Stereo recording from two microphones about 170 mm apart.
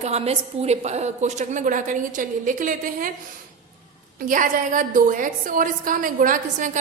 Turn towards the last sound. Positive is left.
turn(degrees=-50)  # may be behind; listen again after turning